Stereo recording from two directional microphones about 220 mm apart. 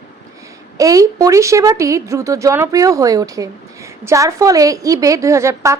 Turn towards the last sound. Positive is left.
turn(degrees=-15)  # may be behind; listen again after turning